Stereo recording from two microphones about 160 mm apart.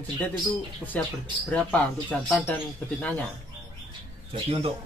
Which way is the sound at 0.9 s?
10° left (ahead or behind).